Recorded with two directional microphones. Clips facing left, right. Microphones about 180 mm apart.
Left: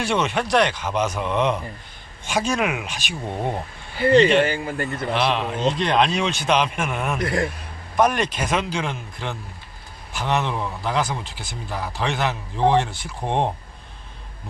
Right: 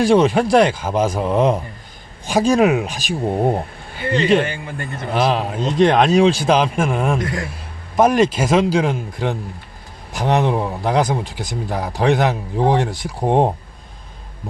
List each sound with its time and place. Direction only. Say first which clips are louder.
0.0 s speech: right 9 dB; 35° right (ahead or behind)
4.0 s speech: left 1 dB; 35° left (ahead or behind)
5.1 s a man's voice: right 5 dB; 40° right (ahead or behind)